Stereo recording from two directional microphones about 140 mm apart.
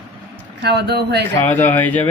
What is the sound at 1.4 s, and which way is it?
Speech, 15° left (ahead or behind).